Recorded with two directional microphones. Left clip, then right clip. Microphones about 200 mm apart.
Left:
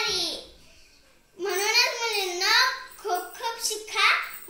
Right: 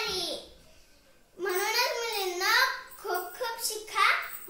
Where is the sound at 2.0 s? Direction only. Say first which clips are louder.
Left 4 dB; 20° right (ahead or behind).